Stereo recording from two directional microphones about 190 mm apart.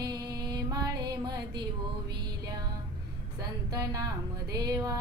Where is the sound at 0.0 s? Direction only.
20° right (ahead or behind).